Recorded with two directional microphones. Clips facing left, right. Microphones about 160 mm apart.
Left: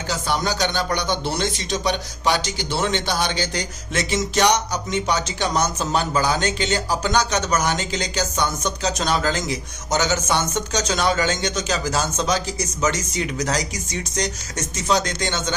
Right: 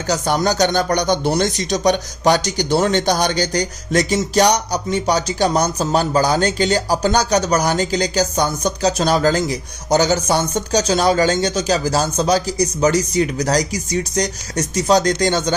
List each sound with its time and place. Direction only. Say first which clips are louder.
0.1 s speech: right 6 dB; 45° right (ahead or behind)